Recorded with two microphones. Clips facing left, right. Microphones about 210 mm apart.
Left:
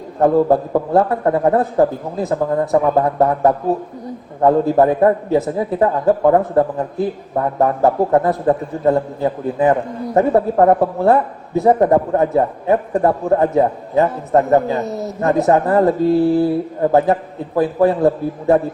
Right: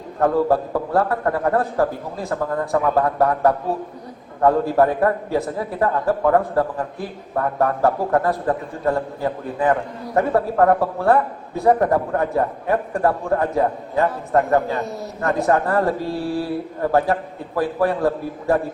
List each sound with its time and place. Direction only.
0.2 s a man's voice: 20° left (ahead or behind)